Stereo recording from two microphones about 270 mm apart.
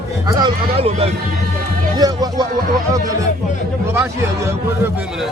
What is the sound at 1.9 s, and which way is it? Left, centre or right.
Music, centre.